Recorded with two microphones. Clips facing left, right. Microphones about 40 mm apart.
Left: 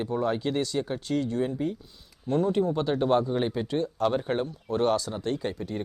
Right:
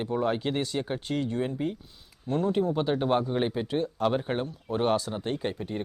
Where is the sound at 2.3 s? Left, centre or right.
Centre.